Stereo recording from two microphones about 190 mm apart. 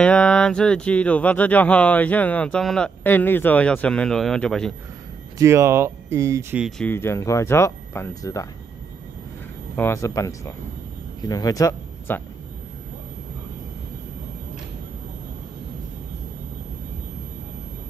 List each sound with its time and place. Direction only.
0.0 s speech: 5° left (ahead or behind)
5.4 s speech: 15° right (ahead or behind)
6.9 s speech: 15° left (ahead or behind)
9.8 s speech: 15° left (ahead or behind)